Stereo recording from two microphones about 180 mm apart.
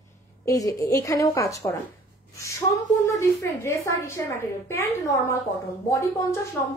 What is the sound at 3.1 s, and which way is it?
A woman's voice, 15° left (ahead or behind).